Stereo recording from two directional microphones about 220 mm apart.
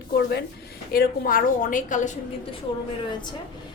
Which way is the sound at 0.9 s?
40° left (ahead or behind).